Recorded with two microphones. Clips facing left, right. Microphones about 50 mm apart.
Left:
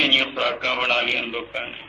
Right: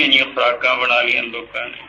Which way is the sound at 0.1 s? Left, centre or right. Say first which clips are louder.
Right 6 dB; right.